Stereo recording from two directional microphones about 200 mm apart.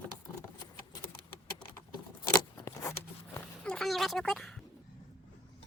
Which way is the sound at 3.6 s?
5° left (ahead or behind).